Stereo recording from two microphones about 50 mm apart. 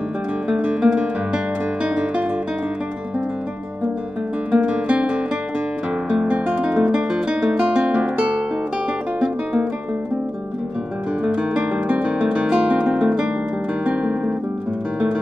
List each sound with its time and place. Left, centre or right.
0.5 s music: right
4.5 s music: centre
6.2 s guitar: right
6.7 s music: centre
11.5 s guitar: right